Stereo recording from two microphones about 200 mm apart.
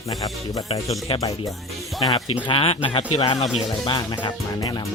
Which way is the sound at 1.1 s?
30° left (ahead or behind).